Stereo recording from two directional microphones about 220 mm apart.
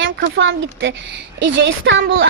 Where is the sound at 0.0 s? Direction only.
55° right (ahead or behind).